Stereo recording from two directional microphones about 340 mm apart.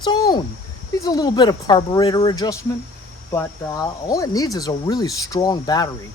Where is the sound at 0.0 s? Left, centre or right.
Centre.